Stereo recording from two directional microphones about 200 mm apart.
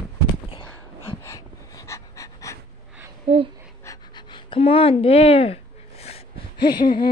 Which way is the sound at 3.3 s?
30° right (ahead or behind).